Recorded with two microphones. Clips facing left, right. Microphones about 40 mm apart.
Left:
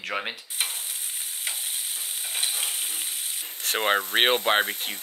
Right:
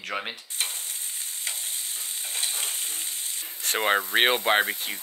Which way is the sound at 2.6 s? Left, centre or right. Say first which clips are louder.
Left 1 dB; centre.